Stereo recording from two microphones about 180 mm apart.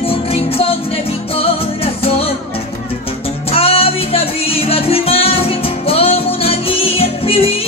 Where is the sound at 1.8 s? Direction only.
35° left (ahead or behind).